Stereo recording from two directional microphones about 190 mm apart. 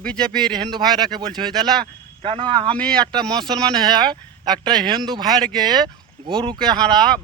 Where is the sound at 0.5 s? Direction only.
20° right (ahead or behind).